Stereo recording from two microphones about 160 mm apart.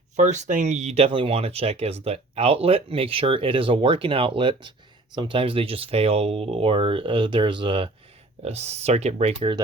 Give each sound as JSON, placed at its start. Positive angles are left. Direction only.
{"t": 0.2, "sound": "speech", "side_deg": -50}
{"t": 8.4, "sound": "speech", "side_deg": -40}